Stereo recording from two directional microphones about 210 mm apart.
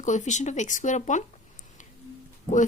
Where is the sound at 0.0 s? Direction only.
35° left (ahead or behind).